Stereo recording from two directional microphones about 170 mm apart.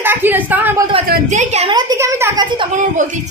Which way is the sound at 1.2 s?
40° right (ahead or behind).